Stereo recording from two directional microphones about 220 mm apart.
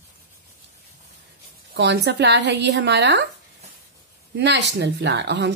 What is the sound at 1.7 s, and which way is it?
A woman's voice, 50° right (ahead or behind).